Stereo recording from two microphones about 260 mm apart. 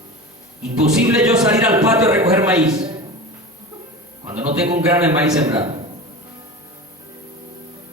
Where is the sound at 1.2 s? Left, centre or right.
Centre.